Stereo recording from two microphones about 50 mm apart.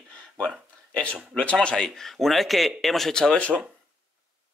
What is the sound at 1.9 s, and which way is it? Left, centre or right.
Speech, centre.